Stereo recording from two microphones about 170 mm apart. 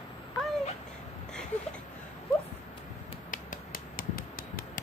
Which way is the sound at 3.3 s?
55° left (ahead or behind).